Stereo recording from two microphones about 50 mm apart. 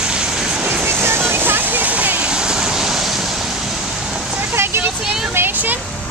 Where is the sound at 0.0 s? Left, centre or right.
Centre.